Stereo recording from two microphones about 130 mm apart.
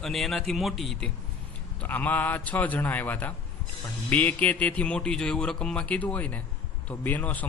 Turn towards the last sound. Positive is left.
turn(degrees=10)  # may be behind; listen again after turning